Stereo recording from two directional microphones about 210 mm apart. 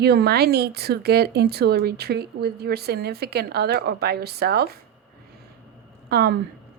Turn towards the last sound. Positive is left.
turn(degrees=-50)  # may be behind; listen again after turning